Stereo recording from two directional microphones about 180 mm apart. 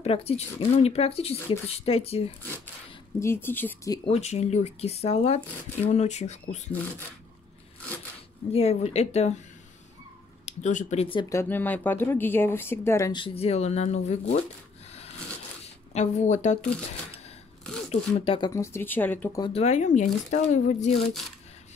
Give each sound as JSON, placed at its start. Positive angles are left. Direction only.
{"t": 0.0, "sound": "speech", "side_deg": 35}
{"t": 3.2, "sound": "speech", "side_deg": 15}
{"t": 4.0, "sound": "speech", "side_deg": 35}
{"t": 8.5, "sound": "speech", "side_deg": 35}
{"t": 10.4, "sound": "speech", "side_deg": 40}
{"t": 11.1, "sound": "speech", "side_deg": 15}
{"t": 13.1, "sound": "speech", "side_deg": 30}
{"t": 15.6, "sound": "a sound", "side_deg": 40}
{"t": 17.8, "sound": "speech", "side_deg": 30}
{"t": 18.5, "sound": "speech", "side_deg": 15}
{"t": 19.4, "sound": "speech", "side_deg": 35}
{"t": 21.0, "sound": "speech", "side_deg": 0}